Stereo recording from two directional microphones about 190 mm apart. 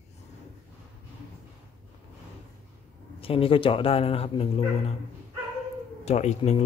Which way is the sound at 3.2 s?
30° left (ahead or behind).